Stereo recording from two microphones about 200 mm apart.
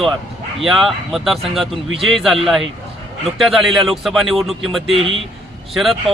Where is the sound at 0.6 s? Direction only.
Centre (ahead or behind).